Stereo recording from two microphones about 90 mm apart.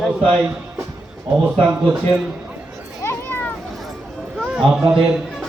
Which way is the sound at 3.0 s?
20° left (ahead or behind).